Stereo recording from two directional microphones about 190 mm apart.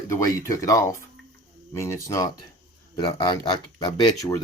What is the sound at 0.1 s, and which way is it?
Speech, 15° left (ahead or behind).